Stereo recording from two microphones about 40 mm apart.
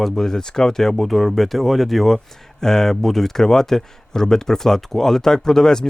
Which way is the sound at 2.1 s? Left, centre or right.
Centre.